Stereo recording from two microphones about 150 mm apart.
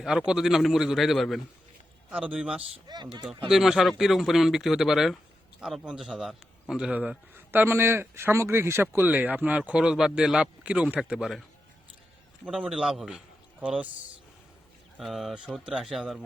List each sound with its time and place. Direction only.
0.0 s speech: 5° right (ahead or behind)
2.8 s speech: 30° right (ahead or behind)
3.5 s a man's voice: centre (ahead or behind)
12.5 s a man's voice: 5° right (ahead or behind)
14.9 s speech: centre (ahead or behind)